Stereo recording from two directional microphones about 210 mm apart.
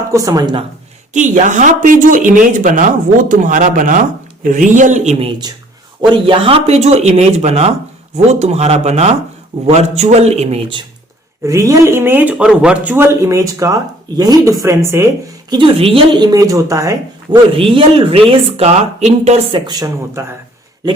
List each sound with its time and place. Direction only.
0.1 s speech: 15° right (ahead or behind)
1.1 s speech: 35° right (ahead or behind)
6.0 s speech: 20° right (ahead or behind)
11.4 s speech: 15° right (ahead or behind)
15.4 s speech: 25° right (ahead or behind)